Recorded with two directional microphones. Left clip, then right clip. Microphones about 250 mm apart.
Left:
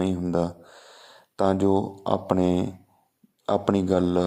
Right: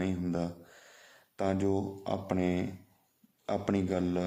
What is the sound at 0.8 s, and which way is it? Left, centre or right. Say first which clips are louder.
Speech: left 8 dB; centre.